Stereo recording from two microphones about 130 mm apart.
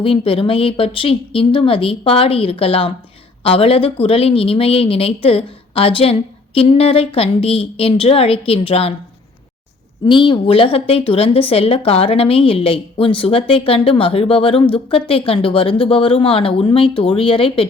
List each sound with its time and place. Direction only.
0.0 s speech: 45° left (ahead or behind)
10.1 s speech: 40° left (ahead or behind)